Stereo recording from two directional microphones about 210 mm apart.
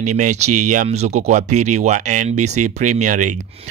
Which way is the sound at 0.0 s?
35° right (ahead or behind).